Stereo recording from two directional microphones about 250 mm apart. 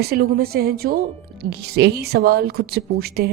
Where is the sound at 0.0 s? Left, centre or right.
Right.